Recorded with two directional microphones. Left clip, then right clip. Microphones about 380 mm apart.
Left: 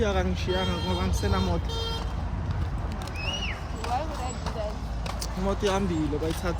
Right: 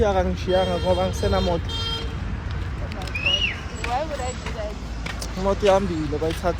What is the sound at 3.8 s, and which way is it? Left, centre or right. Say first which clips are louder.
Speech: right 5 dB; centre.